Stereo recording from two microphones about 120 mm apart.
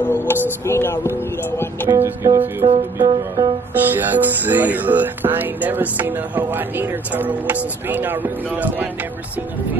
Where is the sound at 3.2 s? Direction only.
30° right (ahead or behind).